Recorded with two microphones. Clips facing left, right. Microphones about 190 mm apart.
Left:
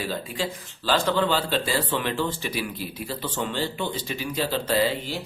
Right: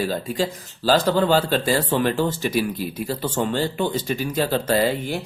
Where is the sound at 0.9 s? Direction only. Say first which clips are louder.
Right 5 dB; 40° right (ahead or behind).